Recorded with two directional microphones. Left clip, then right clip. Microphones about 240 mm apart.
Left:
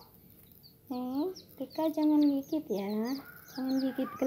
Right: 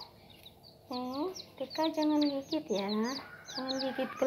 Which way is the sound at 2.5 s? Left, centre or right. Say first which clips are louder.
Even; centre.